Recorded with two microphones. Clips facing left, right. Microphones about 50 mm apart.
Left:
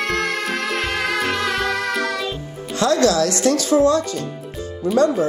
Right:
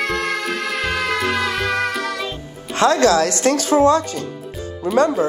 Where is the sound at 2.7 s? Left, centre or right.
Right.